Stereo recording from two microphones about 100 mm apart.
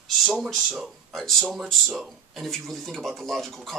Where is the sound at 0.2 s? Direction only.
Centre (ahead or behind).